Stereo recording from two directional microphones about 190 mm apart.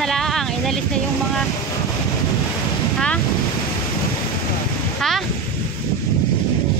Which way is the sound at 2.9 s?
5° left (ahead or behind).